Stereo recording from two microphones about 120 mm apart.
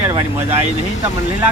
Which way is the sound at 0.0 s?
20° right (ahead or behind).